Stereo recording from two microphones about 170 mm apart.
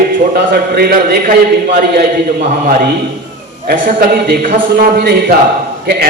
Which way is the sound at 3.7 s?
60° right (ahead or behind).